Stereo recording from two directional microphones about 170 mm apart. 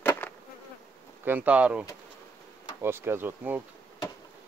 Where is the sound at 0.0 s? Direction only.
15° left (ahead or behind).